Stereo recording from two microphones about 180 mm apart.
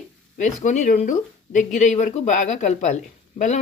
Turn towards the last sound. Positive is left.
turn(degrees=40)  # may be behind; listen again after turning